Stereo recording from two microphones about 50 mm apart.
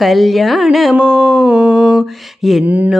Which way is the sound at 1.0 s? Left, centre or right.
Centre.